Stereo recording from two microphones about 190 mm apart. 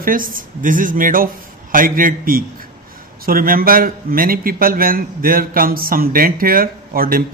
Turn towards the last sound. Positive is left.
turn(degrees=-50)  # may be behind; listen again after turning